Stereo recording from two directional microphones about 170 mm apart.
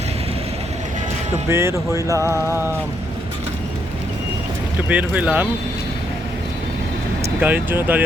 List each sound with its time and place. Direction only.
1.5 s music: 15° right (ahead or behind)
4.9 s music: 10° right (ahead or behind)
7.3 s music: 10° right (ahead or behind)